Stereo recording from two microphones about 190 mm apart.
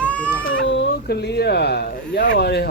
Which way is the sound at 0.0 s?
5° left (ahead or behind).